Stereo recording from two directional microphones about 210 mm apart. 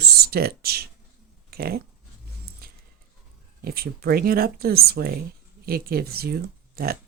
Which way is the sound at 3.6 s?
45° right (ahead or behind).